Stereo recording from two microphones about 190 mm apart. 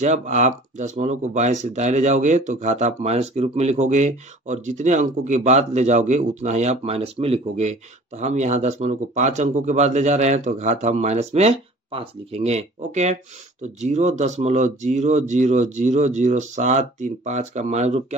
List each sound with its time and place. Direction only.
0.0 s speech: 40° right (ahead or behind)